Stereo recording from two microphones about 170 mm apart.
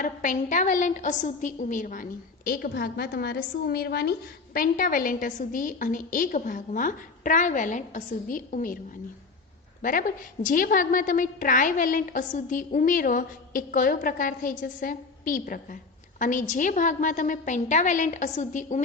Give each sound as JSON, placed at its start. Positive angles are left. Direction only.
{"t": 0.0, "sound": "a woman's voice", "side_deg": 50}
{"t": 4.5, "sound": "a woman's voice", "side_deg": 55}
{"t": 9.8, "sound": "a woman's voice", "side_deg": 50}